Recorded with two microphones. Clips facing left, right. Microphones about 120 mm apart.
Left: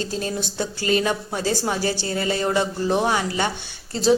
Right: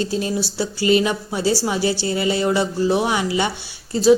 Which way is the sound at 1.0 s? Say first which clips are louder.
Right 2 dB; 10° right (ahead or behind).